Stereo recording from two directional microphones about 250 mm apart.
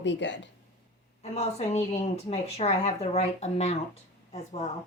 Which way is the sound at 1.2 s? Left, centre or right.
Left.